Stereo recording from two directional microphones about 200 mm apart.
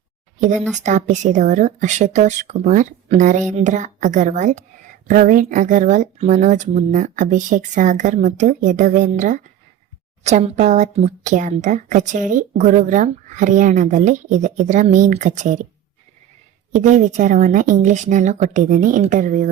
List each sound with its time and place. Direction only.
0.8 s a woman's voice: 35° right (ahead or behind)
16.7 s a woman's voice: 40° right (ahead or behind)